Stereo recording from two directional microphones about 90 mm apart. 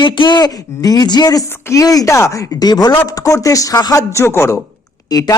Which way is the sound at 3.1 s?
40° left (ahead or behind).